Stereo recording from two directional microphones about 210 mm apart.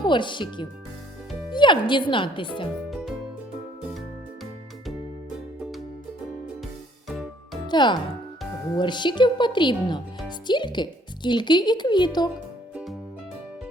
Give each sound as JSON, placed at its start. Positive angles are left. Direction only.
{"t": 0.0, "sound": "speech", "side_deg": 20}
{"t": 2.9, "sound": "music", "side_deg": 0}
{"t": 7.1, "sound": "music", "side_deg": 0}
{"t": 7.7, "sound": "speech", "side_deg": 20}
{"t": 12.7, "sound": "music", "side_deg": 0}